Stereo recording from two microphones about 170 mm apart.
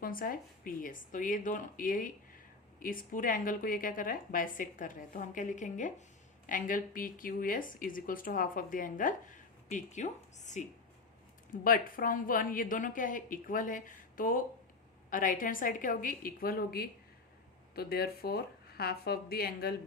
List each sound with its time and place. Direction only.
0.0 s speech: 55° left (ahead or behind)
11.5 s speech: 60° left (ahead or behind)